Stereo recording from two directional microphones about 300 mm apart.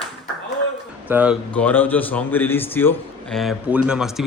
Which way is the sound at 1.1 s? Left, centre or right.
Centre.